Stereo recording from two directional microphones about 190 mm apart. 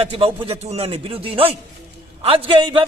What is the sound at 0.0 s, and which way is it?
A man's voice, 30° right (ahead or behind).